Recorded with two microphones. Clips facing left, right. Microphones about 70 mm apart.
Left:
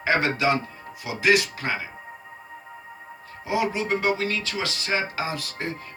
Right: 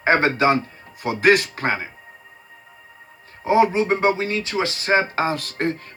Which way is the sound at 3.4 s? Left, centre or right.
Right.